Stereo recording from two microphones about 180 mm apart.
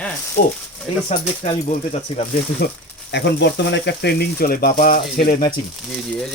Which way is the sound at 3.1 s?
75° left (ahead or behind).